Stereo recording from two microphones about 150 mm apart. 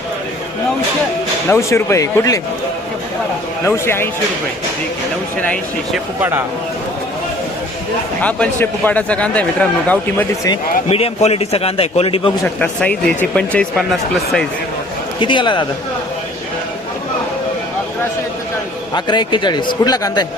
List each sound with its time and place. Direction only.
1.5 s a man's voice: 20° left (ahead or behind)
3.7 s speech: 15° left (ahead or behind)
6.1 s speech: 15° right (ahead or behind)
8.2 s speech: 10° left (ahead or behind)
10.8 s a man's voice: 40° left (ahead or behind)
12.5 s speech: 10° left (ahead or behind)
15.2 s a man's voice: 30° left (ahead or behind)
18.9 s a man's voice: 30° left (ahead or behind)